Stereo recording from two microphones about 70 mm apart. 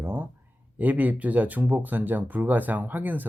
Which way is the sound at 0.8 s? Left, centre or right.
Right.